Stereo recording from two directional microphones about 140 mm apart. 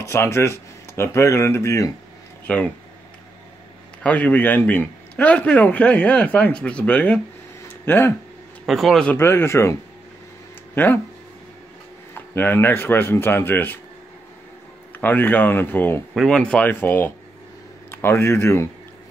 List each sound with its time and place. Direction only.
0.0 s speech: 20° left (ahead or behind)
2.4 s speech: 10° left (ahead or behind)
4.0 s a man's voice: 10° left (ahead or behind)
8.6 s a man's voice: centre (ahead or behind)
9.1 s a man's voice: 15° left (ahead or behind)
12.1 s a man's voice: 15° left (ahead or behind)
15.0 s a man's voice: 15° left (ahead or behind)